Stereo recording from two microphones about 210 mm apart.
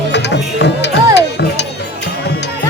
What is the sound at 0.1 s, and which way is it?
Music, 55° left (ahead or behind).